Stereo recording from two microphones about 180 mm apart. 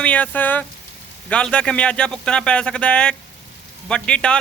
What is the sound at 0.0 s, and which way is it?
Speech, 10° left (ahead or behind).